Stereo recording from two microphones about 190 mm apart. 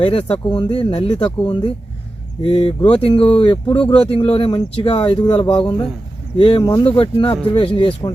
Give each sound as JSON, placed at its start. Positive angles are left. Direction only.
{"t": 0.0, "sound": "speech", "side_deg": 30}